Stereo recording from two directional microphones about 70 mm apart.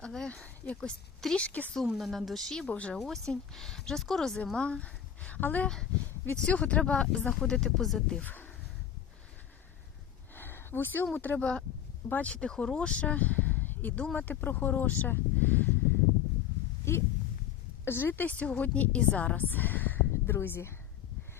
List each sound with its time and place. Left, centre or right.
0.0 s speech: centre
2.0 s speech: centre
3.0 s speech: centre; by 5.6 s left
5.6 s speech: centre
8.2 s speech: left
10.3 s a sound: left
11.1 s a woman's voice: left
12.3 s a woman's voice: centre
16.9 s a woman's voice: left